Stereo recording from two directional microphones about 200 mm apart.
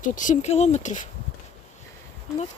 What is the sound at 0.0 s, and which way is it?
Speech, 40° left (ahead or behind).